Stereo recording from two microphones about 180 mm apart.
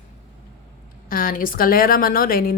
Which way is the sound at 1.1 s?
50° left (ahead or behind).